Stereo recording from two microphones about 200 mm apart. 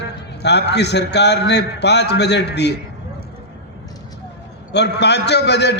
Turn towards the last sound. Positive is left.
turn(degrees=60)  # may be behind; listen again after turning